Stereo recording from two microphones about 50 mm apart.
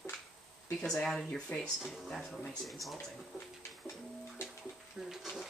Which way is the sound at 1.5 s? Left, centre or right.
Left.